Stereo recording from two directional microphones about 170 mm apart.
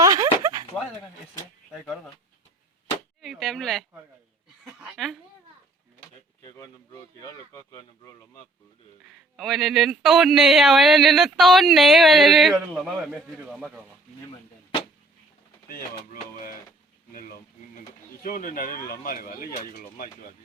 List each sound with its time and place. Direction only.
0.0 s a sound: 20° right (ahead or behind)
1.7 s speech: centre (ahead or behind)
3.2 s speech: centre (ahead or behind)
6.4 s speech: 20° left (ahead or behind)
9.0 s speech: centre (ahead or behind)
15.7 s speech: 55° left (ahead or behind)